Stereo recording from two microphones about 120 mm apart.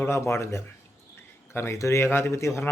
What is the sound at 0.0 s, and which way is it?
A man's voice, 20° left (ahead or behind).